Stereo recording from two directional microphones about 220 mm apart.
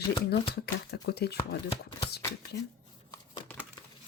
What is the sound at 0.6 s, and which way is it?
Speech, 50° left (ahead or behind).